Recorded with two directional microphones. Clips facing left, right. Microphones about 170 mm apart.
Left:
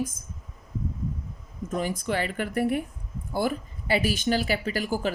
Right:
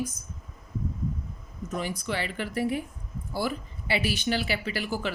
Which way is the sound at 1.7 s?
50° left (ahead or behind).